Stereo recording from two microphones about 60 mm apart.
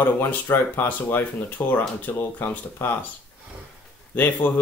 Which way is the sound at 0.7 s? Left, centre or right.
Left.